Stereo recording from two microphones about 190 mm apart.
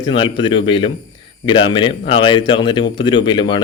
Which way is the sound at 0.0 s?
25° left (ahead or behind).